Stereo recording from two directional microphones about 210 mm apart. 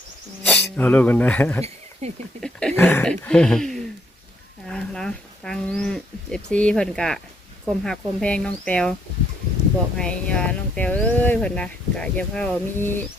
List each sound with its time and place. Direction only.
0.4 s speech: 5° left (ahead or behind)
1.6 s a sound: 30° right (ahead or behind)
2.4 s speech: 5° left (ahead or behind)
10.0 s speech: 5° left (ahead or behind)